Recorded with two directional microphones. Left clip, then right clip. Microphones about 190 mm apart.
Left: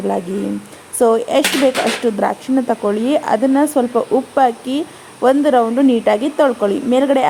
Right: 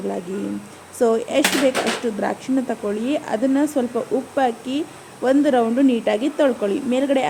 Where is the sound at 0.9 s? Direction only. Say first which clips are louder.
Left 5 dB; 25° left (ahead or behind).